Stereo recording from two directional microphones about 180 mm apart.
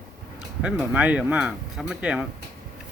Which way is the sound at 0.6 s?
5° right (ahead or behind).